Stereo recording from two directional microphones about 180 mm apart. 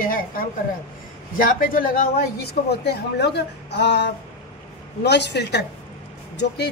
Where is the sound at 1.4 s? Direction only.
50° left (ahead or behind).